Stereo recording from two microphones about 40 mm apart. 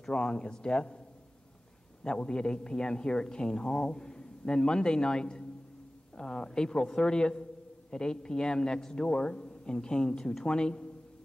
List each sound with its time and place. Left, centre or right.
0.0 s a man's voice: left
2.0 s a man's voice: left